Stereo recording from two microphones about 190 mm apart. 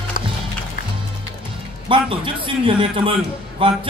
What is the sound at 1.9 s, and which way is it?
A man's voice, 25° right (ahead or behind).